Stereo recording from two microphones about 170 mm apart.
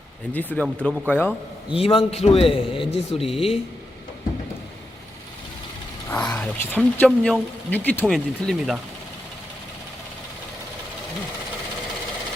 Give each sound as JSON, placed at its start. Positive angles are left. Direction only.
{"t": 0.3, "sound": "speech", "side_deg": 10}
{"t": 1.7, "sound": "a man's voice", "side_deg": 35}
{"t": 6.1, "sound": "a sound", "side_deg": 5}
{"t": 7.0, "sound": "speech", "side_deg": 5}